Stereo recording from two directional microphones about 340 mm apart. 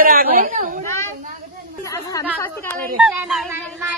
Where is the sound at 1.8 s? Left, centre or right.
Centre.